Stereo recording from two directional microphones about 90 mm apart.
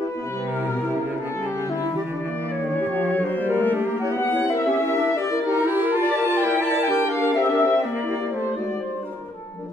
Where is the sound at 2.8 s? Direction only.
25° right (ahead or behind).